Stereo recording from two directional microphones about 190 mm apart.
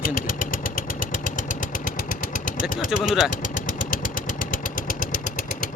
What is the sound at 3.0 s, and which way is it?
Speech, centre (ahead or behind).